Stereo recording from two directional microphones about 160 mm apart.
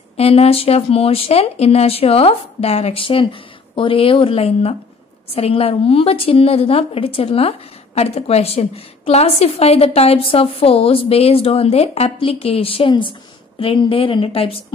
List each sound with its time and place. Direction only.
0.2 s speech: 40° left (ahead or behind)